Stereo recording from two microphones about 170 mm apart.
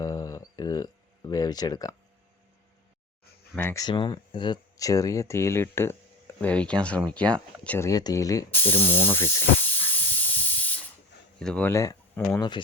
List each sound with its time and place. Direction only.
0.0 s a sound: 20° left (ahead or behind)
3.5 s speech: 10° left (ahead or behind)
3.8 s speech: 25° left (ahead or behind); by 7.9 s 10° left (ahead or behind)
7.9 s speech: 20° left (ahead or behind)
11.3 s speech: 5° left (ahead or behind)
11.7 s speech: 20° left (ahead or behind)